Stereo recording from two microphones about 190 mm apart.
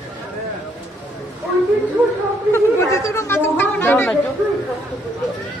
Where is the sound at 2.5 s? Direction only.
15° left (ahead or behind).